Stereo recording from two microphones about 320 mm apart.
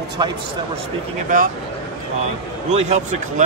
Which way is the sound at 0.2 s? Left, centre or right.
Centre.